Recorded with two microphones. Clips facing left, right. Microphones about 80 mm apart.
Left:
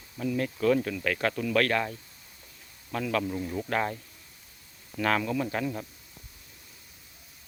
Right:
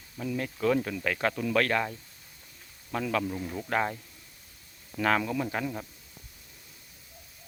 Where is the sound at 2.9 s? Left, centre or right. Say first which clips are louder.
Even; centre.